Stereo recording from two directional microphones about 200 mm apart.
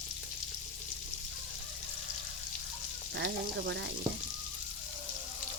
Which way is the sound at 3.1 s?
65° right (ahead or behind).